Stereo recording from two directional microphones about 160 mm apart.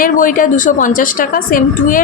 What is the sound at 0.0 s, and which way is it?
A woman's voice, 60° left (ahead or behind).